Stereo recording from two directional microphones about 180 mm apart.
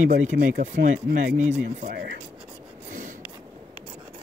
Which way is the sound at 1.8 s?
55° right (ahead or behind).